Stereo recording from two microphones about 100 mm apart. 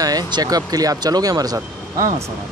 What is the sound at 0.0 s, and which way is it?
Speech, 40° right (ahead or behind).